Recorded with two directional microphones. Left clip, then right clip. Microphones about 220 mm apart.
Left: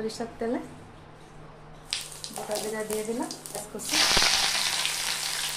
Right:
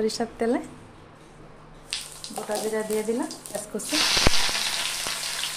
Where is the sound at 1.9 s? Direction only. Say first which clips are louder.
Even; centre (ahead or behind).